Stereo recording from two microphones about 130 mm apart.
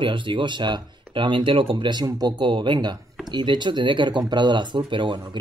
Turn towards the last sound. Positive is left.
turn(degrees=-40)  # may be behind; listen again after turning